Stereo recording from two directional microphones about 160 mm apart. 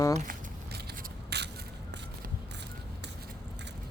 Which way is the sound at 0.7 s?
90° right.